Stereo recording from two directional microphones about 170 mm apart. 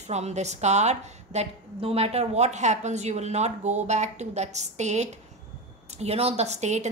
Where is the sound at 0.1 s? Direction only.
40° right (ahead or behind).